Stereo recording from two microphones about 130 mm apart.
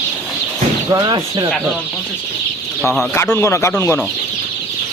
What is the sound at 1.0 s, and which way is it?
Speech, 35° right (ahead or behind).